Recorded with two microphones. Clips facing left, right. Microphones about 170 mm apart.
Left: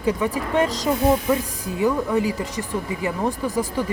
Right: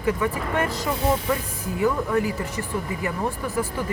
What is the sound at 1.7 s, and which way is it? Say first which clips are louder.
Speech: left 2 dB; 20° left (ahead or behind).